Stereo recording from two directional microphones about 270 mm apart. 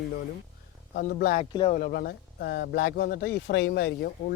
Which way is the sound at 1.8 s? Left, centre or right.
Left.